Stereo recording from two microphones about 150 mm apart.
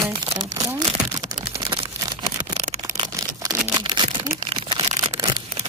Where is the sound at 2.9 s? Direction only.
30° right (ahead or behind).